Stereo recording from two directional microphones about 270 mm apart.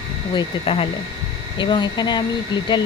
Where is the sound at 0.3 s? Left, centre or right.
Left.